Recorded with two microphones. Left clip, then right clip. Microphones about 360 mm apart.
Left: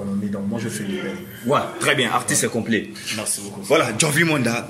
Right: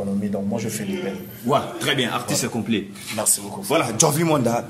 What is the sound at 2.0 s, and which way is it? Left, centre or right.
A man's voice, centre.